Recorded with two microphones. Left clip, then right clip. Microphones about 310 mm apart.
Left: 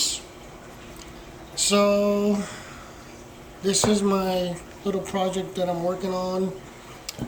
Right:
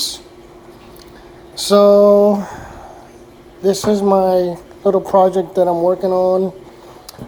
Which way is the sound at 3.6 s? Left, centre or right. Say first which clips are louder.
Right 7 dB; centre.